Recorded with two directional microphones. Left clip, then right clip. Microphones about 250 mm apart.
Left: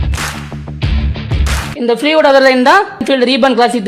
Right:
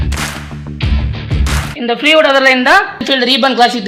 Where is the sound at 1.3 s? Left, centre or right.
Centre.